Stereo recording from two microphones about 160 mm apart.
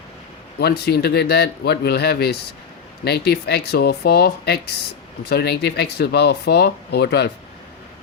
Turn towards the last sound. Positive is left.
turn(degrees=90)